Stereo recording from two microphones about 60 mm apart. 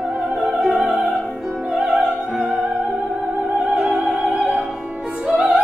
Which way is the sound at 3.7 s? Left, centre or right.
Centre.